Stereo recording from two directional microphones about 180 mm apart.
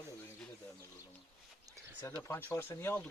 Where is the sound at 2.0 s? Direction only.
15° left (ahead or behind).